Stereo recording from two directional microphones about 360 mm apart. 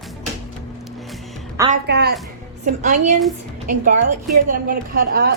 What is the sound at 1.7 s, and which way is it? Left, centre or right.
A woman's voice, right.